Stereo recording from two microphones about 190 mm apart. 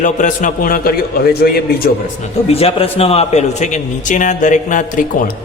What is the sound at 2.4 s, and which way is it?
A man's voice, 30° left (ahead or behind).